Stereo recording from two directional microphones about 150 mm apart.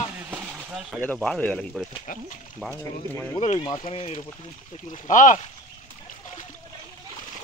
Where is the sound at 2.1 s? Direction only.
65° left (ahead or behind).